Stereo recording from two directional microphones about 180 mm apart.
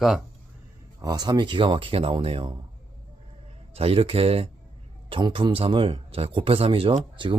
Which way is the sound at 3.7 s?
30° right (ahead or behind).